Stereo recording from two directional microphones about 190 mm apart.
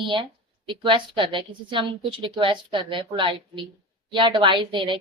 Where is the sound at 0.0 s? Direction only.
25° right (ahead or behind).